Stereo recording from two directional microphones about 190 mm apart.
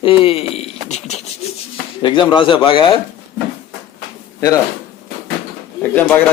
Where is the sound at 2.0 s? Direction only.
25° left (ahead or behind).